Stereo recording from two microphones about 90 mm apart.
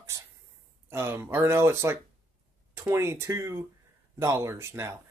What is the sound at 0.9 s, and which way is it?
Speech, 30° right (ahead or behind).